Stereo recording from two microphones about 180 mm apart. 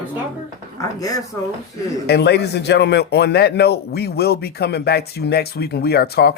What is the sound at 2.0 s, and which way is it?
A man's voice, 65° left (ahead or behind).